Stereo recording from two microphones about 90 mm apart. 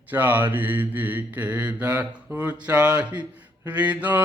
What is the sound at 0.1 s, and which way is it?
Mantra, 20° right (ahead or behind).